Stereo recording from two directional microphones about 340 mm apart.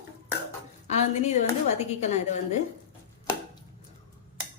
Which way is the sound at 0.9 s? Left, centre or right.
Centre.